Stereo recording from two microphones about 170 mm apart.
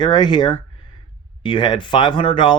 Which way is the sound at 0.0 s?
25° left (ahead or behind).